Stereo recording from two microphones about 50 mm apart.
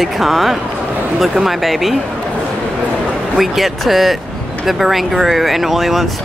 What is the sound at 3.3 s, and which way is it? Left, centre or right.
Speech, centre.